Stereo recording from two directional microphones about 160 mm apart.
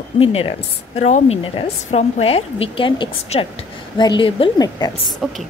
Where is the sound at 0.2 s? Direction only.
35° left (ahead or behind).